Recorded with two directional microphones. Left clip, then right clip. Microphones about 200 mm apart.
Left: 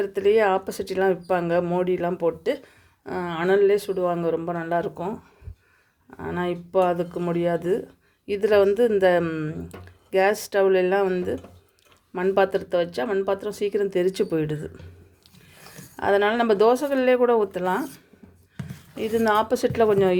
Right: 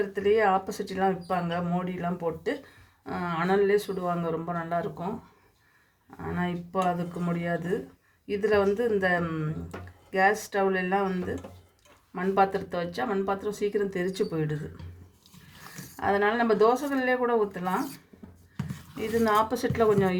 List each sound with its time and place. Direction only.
0.0 s speech: 45° left (ahead or behind)
6.1 s speech: 45° left (ahead or behind)
16.0 s speech: 40° left (ahead or behind)
18.9 s speech: 40° left (ahead or behind)